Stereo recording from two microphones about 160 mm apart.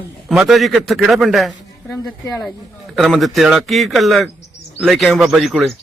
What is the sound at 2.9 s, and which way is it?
A man's voice, centre (ahead or behind).